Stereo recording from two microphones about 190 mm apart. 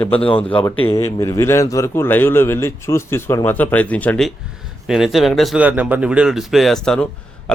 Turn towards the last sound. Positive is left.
turn(degrees=5)  # may be behind; listen again after turning